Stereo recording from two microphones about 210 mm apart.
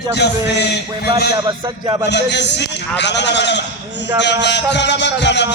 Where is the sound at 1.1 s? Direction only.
20° right (ahead or behind).